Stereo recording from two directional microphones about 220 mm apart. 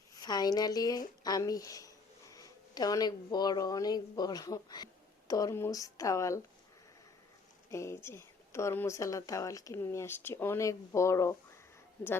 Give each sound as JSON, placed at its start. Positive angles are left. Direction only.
{"t": 0.1, "sound": "speech", "side_deg": 20}
{"t": 7.7, "sound": "speech", "side_deg": 10}